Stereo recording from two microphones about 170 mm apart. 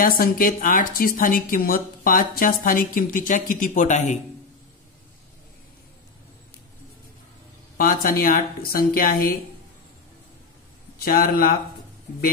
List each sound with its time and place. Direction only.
0.0 s a woman's voice: 55° left (ahead or behind)
7.7 s a woman's voice: 55° left (ahead or behind)
11.0 s a woman's voice: 60° left (ahead or behind)